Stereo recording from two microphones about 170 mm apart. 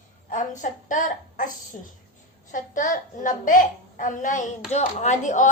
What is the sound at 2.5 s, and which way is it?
A woman's voice, 50° left (ahead or behind).